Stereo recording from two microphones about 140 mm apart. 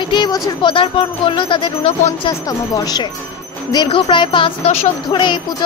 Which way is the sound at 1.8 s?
45° left (ahead or behind).